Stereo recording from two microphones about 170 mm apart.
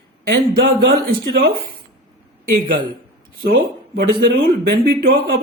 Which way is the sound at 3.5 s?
60° right (ahead or behind).